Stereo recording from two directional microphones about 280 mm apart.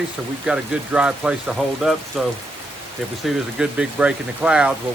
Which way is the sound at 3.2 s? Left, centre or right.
Centre.